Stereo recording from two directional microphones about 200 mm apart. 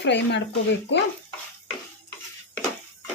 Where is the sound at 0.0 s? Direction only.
60° left (ahead or behind).